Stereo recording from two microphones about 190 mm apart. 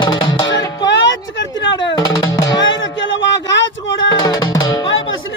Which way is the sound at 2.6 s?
80° left.